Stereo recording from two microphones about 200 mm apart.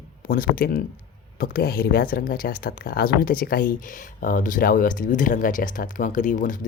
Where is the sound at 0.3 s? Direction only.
45° left (ahead or behind).